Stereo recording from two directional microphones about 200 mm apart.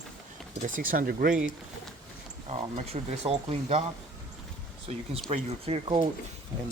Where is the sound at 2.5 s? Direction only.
30° right (ahead or behind).